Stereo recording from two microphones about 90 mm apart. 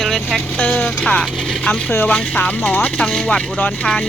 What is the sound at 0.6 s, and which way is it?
Speech, 15° left (ahead or behind).